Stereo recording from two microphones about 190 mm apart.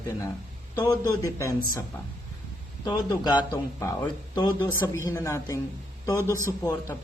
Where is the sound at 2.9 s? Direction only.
20° left (ahead or behind).